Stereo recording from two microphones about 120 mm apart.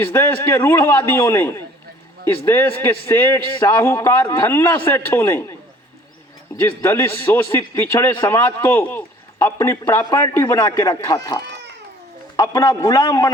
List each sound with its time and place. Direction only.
0.0 s a man's voice: 20° left (ahead or behind)
6.6 s a man's voice: 20° left (ahead or behind)
10.6 s a man's voice: 35° left (ahead or behind)
12.4 s a man's voice: 30° left (ahead or behind)